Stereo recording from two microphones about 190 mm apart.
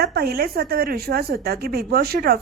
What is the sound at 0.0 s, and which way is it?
A woman's voice, 55° right (ahead or behind).